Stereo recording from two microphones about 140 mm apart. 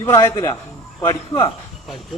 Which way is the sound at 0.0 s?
20° left (ahead or behind).